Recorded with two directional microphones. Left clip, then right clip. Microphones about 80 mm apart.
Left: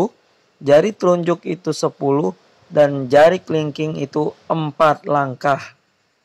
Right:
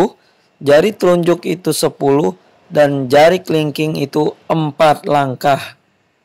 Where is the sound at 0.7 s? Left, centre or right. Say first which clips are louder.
Right 3 dB; right.